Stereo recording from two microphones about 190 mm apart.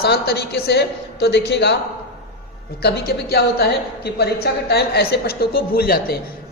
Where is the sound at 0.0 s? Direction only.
55° left (ahead or behind).